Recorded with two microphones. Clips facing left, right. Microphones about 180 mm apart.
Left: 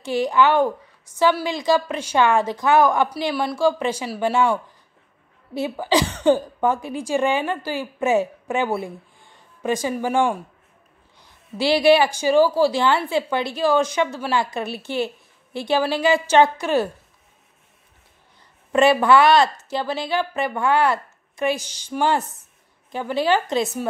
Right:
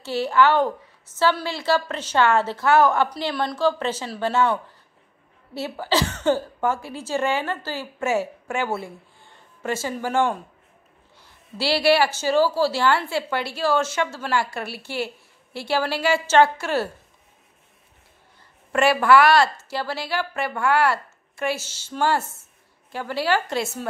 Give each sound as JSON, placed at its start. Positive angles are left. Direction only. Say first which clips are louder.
{"t": 0.0, "sound": "a woman's voice", "louder": "left 1 dB", "side_deg": 15}
{"t": 11.5, "sound": "a woman's voice", "louder": "left 4 dB", "side_deg": 15}
{"t": 18.7, "sound": "a woman's voice", "louder": "left 2 dB", "side_deg": 20}